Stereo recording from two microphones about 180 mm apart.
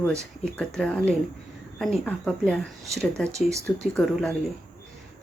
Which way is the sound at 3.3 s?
15° right (ahead or behind).